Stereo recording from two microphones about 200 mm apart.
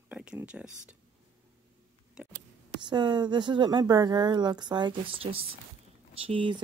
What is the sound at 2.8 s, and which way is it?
Speech, 25° right (ahead or behind).